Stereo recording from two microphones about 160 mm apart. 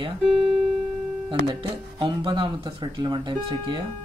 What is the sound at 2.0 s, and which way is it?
Speech, 35° right (ahead or behind).